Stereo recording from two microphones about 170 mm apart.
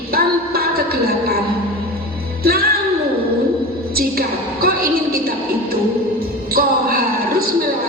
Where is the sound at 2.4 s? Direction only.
60° right (ahead or behind).